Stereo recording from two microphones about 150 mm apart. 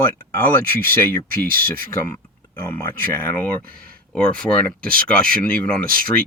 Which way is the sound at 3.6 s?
70° right (ahead or behind).